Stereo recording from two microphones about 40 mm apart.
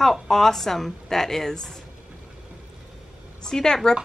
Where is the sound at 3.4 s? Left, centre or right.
Centre.